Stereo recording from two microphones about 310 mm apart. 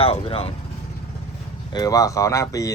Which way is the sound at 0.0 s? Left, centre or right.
Centre.